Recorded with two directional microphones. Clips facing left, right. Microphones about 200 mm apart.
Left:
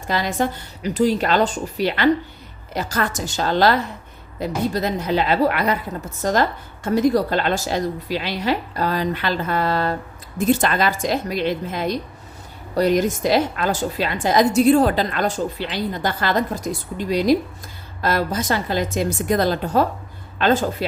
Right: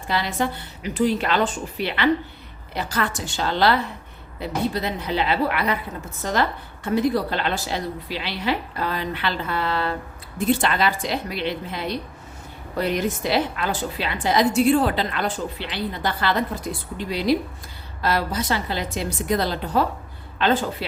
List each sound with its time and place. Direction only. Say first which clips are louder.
0.1 s a woman's voice: left 3 dB; 45° left (ahead or behind)